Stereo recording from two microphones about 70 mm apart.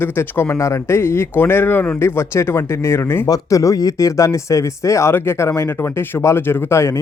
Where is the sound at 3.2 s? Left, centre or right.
Left.